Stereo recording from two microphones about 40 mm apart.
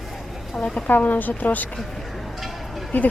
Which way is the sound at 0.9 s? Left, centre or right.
Left.